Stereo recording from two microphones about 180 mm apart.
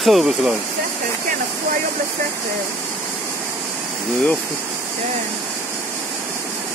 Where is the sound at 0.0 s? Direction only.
Centre (ahead or behind).